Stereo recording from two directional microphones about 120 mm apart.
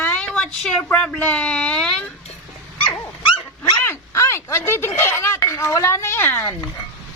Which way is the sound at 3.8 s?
20° left (ahead or behind).